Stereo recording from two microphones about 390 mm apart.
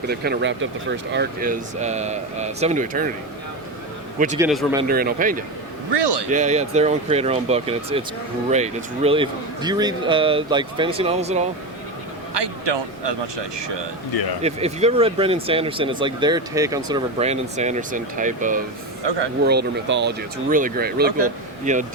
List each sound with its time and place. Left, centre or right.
0.1 s speech: right
4.4 s speech: centre
4.8 s speech: right
5.9 s a man's voice: right
6.3 s speech: centre
12.3 s speech: right
14.4 s speech: centre